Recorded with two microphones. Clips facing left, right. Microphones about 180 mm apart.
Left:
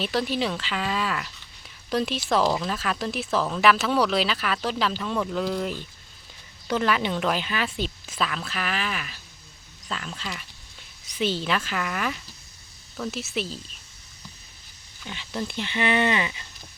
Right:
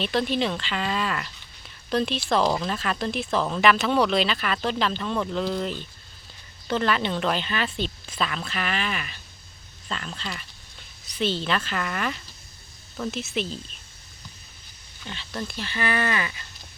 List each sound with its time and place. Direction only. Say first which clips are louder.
0.0 s speech: right 1 dB; 5° left (ahead or behind)
15.0 s speech: left 2 dB; 10° left (ahead or behind)